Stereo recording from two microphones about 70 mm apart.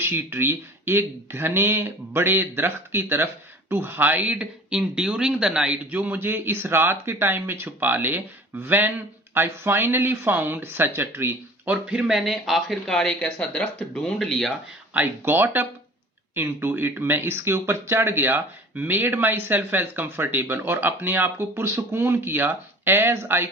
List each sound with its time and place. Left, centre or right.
0.0 s speech: right
11.9 s speech: centre
13.0 s speech: centre
14.0 s speech: centre
14.9 s speech: right